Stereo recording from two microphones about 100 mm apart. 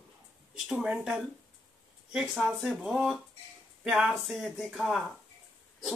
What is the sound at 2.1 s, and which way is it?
Speech, 10° right (ahead or behind).